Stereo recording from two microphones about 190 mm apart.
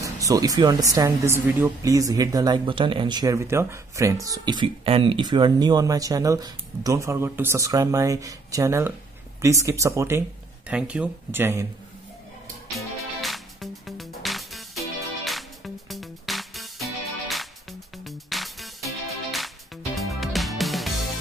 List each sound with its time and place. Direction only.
0.0 s speech: 15° right (ahead or behind)
13.2 s music: centre (ahead or behind)